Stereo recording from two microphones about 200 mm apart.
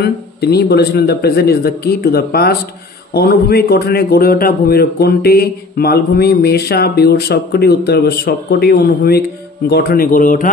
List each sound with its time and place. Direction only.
0.0 s a man's voice: 55° left (ahead or behind)